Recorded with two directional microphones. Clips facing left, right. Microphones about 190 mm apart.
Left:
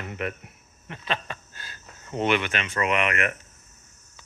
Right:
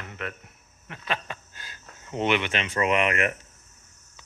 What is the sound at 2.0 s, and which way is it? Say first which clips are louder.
Speech: left 1 dB; 15° right (ahead or behind).